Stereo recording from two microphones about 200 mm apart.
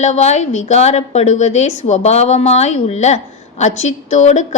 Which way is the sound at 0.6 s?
35° left (ahead or behind).